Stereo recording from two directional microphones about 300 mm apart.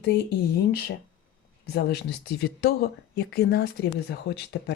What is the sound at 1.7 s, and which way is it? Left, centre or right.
Speech, left.